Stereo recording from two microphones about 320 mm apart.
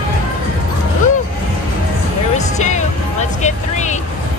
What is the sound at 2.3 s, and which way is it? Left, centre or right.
Music, left.